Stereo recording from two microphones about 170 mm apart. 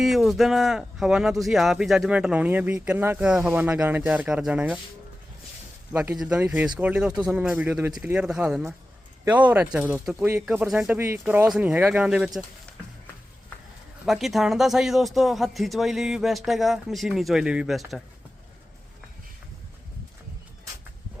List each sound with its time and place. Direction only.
0.0 s speech: centre (ahead or behind)
5.9 s speech: 10° right (ahead or behind)
14.0 s speech: centre (ahead or behind)